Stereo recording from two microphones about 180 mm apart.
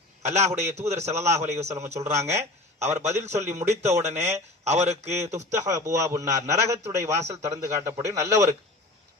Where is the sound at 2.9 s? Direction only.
40° right (ahead or behind).